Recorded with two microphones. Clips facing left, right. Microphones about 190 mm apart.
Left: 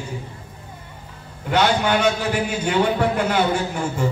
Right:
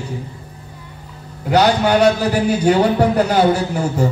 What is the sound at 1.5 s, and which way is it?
A man's voice, 40° right (ahead or behind).